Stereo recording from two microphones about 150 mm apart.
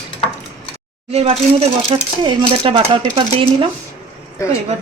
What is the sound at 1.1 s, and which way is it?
Speech, 45° right (ahead or behind).